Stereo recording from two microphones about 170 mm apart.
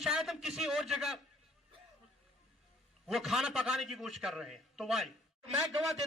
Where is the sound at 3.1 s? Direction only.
Centre (ahead or behind).